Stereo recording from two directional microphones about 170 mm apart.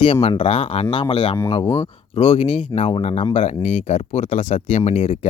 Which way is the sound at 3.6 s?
45° left (ahead or behind).